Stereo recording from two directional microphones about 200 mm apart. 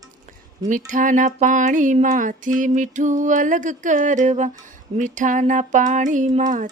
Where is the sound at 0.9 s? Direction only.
40° right (ahead or behind).